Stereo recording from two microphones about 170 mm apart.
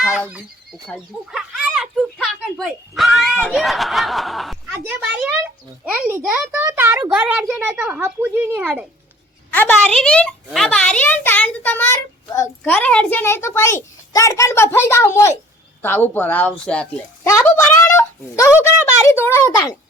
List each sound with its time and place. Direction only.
0.3 s speech: 5° right (ahead or behind)
1.3 s fowl: 5° right (ahead or behind)
3.5 s speech: centre (ahead or behind)
4.7 s a woman's voice: 10° right (ahead or behind)
9.5 s a child's voice: 10° left (ahead or behind)